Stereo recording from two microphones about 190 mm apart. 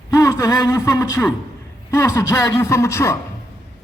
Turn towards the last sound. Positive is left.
turn(degrees=15)  # may be behind; listen again after turning